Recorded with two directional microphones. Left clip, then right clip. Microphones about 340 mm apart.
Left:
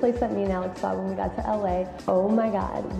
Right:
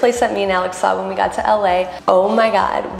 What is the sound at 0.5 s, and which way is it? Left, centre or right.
A woman's voice, centre.